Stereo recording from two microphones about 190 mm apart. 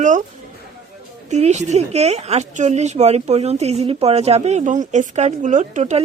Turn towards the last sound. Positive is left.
turn(degrees=-40)  # may be behind; listen again after turning